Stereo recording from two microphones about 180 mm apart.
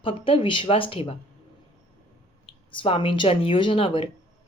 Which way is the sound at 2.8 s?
30° left (ahead or behind).